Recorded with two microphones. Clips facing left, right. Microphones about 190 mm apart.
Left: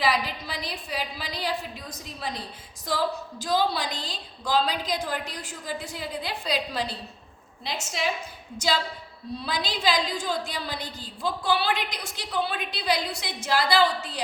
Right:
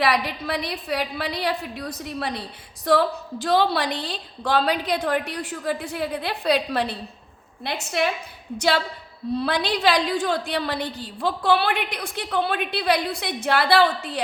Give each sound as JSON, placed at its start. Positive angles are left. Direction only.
{"t": 0.0, "sound": "a woman's voice", "side_deg": -65}